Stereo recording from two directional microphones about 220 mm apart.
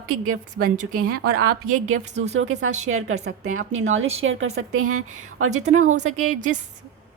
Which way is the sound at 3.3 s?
70° right (ahead or behind).